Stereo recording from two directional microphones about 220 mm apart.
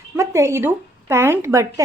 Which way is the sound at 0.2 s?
15° right (ahead or behind).